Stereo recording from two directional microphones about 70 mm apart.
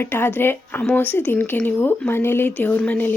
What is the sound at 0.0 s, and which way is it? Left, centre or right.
Speech, left.